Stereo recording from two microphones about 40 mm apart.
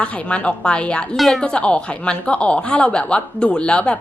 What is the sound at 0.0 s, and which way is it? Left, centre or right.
Speech, left.